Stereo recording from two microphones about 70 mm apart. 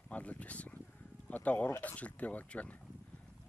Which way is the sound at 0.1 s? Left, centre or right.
Centre.